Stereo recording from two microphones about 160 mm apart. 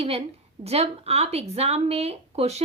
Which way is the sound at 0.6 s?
40° right (ahead or behind).